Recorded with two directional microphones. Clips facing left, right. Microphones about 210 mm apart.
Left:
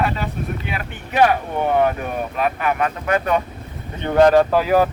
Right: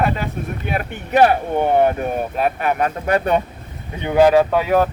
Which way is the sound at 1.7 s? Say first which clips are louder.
Right 1 dB; 35° right (ahead or behind).